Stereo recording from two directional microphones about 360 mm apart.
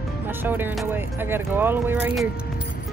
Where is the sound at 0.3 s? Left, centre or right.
Centre.